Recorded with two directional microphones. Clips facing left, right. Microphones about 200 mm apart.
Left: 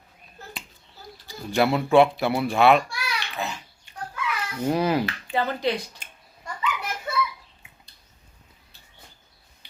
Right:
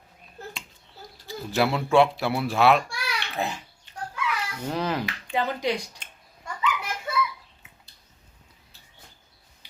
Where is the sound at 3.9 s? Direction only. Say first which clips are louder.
Right 1 dB; 10° left (ahead or behind).